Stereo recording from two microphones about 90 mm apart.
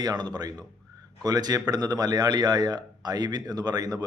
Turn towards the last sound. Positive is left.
turn(degrees=-45)  # may be behind; listen again after turning